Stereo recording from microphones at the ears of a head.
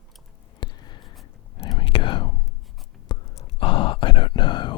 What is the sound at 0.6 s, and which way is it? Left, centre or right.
Whispering, left.